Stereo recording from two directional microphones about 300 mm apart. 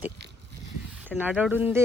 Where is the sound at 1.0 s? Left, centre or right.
Centre.